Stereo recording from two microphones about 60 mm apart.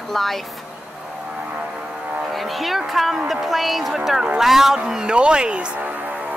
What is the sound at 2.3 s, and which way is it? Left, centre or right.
Speech, centre.